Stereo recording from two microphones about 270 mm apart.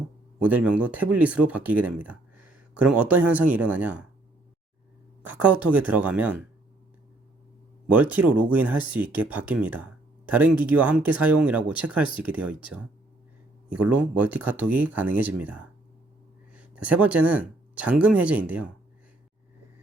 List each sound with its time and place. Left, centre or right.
0.4 s speech: centre
5.2 s speech: centre
7.9 s speech: centre
13.9 s speech: centre